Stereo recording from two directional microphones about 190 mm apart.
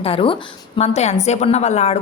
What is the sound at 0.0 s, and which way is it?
A woman's voice, 30° left (ahead or behind).